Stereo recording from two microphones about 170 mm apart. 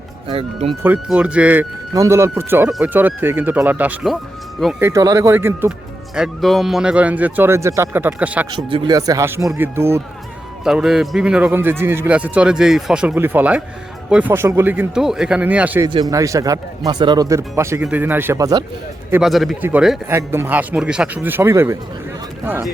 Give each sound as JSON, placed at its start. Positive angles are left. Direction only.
{"t": 0.3, "sound": "speech", "side_deg": -35}
{"t": 0.8, "sound": "a man's voice", "side_deg": -10}
{"t": 4.8, "sound": "a man's voice", "side_deg": -20}
{"t": 6.1, "sound": "a man's voice", "side_deg": 0}
{"t": 8.4, "sound": "a man's voice", "side_deg": -25}
{"t": 10.6, "sound": "a man's voice", "side_deg": -5}
{"t": 15.9, "sound": "a man's voice", "side_deg": -25}
{"t": 19.2, "sound": "a man's voice", "side_deg": 0}